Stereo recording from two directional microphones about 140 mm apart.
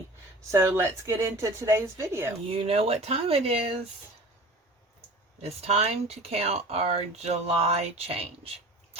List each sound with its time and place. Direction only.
0.5 s a woman's voice: 20° right (ahead or behind)
2.5 s speech: 45° right (ahead or behind)
5.4 s speech: 50° right (ahead or behind)